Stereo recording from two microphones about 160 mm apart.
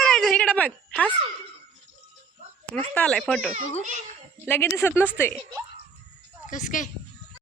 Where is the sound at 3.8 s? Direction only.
50° right (ahead or behind).